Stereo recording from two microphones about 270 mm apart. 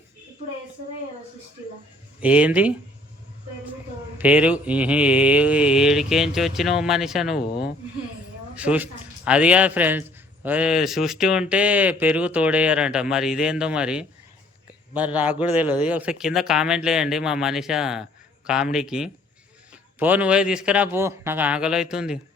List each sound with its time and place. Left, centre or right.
1.6 s speech: centre
4.2 s speech: centre
8.5 s speech: centre